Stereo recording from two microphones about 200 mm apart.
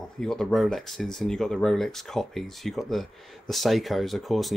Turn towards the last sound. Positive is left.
turn(degrees=0)  # may be behind; listen again after turning